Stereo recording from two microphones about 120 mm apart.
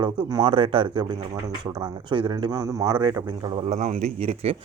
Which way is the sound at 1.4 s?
35° right (ahead or behind).